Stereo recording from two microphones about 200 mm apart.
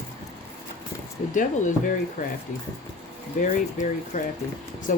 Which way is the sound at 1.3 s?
40° left (ahead or behind).